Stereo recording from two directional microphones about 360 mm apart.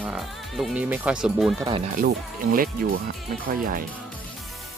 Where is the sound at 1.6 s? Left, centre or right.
Centre.